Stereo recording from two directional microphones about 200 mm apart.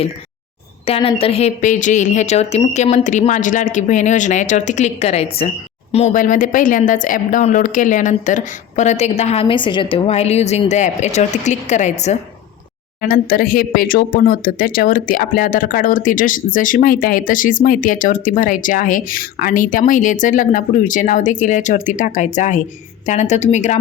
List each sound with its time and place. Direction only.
0.9 s a woman's voice: 30° left (ahead or behind)
13.0 s a woman's voice: 45° left (ahead or behind)